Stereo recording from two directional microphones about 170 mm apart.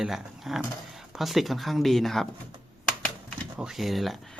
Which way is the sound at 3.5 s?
5° right (ahead or behind).